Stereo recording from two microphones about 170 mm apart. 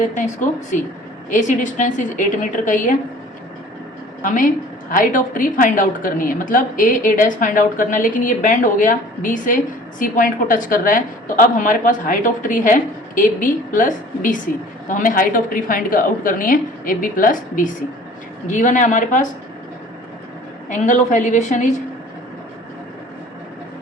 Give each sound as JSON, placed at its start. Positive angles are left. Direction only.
{"t": 0.1, "sound": "a woman's voice", "side_deg": 50}
{"t": 4.2, "sound": "a woman's voice", "side_deg": 50}
{"t": 20.7, "sound": "a woman's voice", "side_deg": 45}